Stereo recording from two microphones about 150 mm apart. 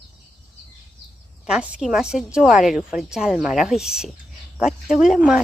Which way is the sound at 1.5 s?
5° right (ahead or behind).